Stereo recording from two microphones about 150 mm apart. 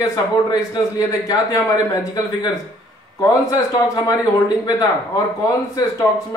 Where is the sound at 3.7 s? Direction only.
25° left (ahead or behind).